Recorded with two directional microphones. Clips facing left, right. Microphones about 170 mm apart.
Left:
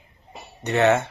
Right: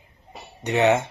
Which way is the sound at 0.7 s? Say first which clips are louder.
Even; 15° right (ahead or behind).